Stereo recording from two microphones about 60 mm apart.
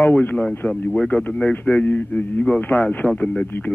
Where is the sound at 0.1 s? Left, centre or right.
Left.